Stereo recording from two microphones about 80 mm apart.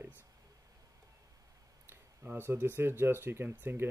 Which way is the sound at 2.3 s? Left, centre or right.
Right.